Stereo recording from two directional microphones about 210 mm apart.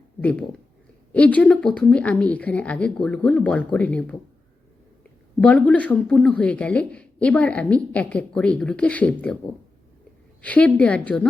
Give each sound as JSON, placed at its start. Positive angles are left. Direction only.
{"t": 0.2, "sound": "speech", "side_deg": 5}
{"t": 5.4, "sound": "speech", "side_deg": 5}
{"t": 10.4, "sound": "a woman's voice", "side_deg": 5}